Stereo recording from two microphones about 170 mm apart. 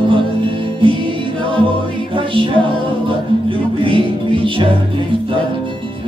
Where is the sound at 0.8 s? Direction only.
30° right (ahead or behind).